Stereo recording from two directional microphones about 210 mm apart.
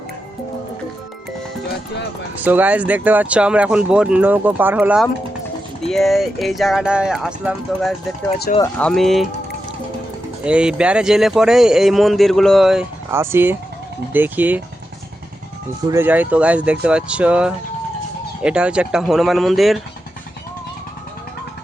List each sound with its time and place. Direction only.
2.3 s speech: 10° right (ahead or behind)
8.5 s speech: 40° left (ahead or behind)
8.8 s speech: 5° left (ahead or behind)
10.4 s speech: 5° right (ahead or behind)
15.9 s speech: 10° right (ahead or behind)